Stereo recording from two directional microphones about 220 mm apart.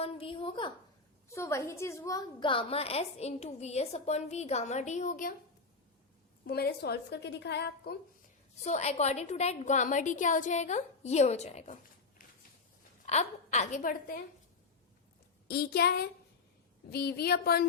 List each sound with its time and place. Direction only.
0.0 s a sound: 25° left (ahead or behind)
1.3 s a woman's voice: 10° left (ahead or behind); by 5.3 s 35° left (ahead or behind)
6.5 s a woman's voice: 45° left (ahead or behind)
8.6 s a woman's voice: 30° left (ahead or behind)
13.1 s a woman's voice: 30° left (ahead or behind)
15.4 s a woman's voice: 45° left (ahead or behind)